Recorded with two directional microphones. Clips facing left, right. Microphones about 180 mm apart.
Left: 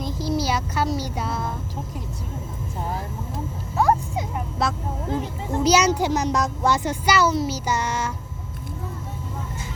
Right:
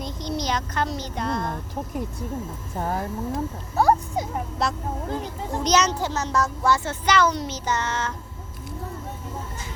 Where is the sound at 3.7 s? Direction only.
35° right (ahead or behind).